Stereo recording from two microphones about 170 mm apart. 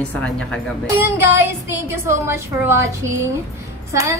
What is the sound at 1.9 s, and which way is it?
Speech, 15° right (ahead or behind).